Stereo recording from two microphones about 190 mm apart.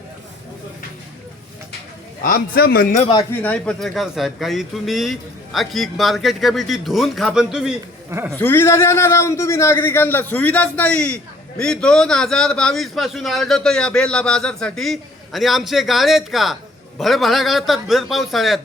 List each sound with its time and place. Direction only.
2.2 s a man's voice: 50° left (ahead or behind)
3.4 s speech: 5° left (ahead or behind)
8.1 s speech: 15° right (ahead or behind)
8.4 s speech: 10° left (ahead or behind)